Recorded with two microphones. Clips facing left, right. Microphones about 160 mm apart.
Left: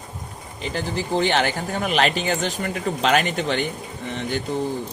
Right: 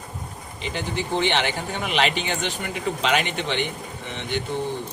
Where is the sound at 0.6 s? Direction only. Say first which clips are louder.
Left 2 dB; 40° left (ahead or behind).